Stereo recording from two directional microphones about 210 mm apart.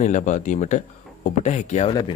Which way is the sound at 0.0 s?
35° left (ahead or behind).